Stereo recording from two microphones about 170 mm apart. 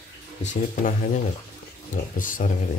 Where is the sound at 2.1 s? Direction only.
50° left (ahead or behind).